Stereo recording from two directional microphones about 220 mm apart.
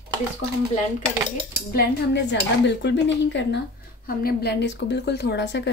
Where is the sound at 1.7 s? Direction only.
50° left (ahead or behind).